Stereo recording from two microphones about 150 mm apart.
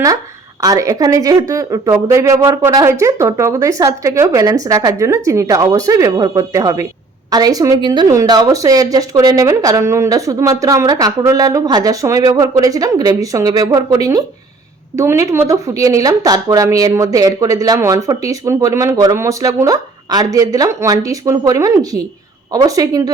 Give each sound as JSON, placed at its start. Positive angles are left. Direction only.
{"t": 0.6, "sound": "speech", "side_deg": -20}